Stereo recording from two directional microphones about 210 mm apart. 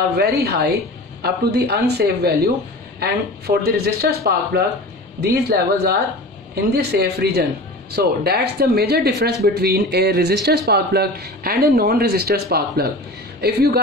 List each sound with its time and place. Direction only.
0.2 s speech: 50° right (ahead or behind)